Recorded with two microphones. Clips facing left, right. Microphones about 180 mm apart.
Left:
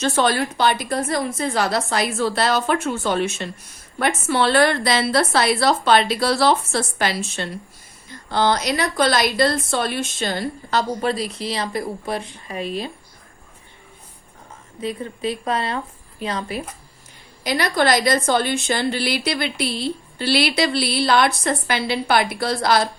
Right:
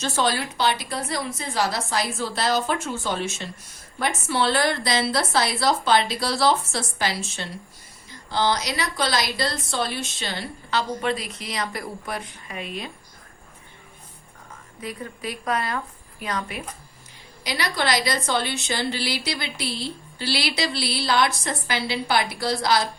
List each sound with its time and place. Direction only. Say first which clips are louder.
0.0 s a woman's voice: left 5 dB; 55° left (ahead or behind); by 12.9 s 35° left (ahead or behind)
14.8 s a woman's voice: left 7 dB; 25° left (ahead or behind)
17.4 s a woman's voice: left 6 dB; 50° left (ahead or behind)